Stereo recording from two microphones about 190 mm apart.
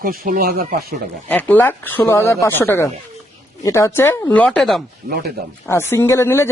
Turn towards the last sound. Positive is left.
turn(degrees=15)  # may be behind; listen again after turning